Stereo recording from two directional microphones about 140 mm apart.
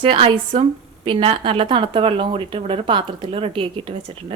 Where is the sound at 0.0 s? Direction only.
40° right (ahead or behind).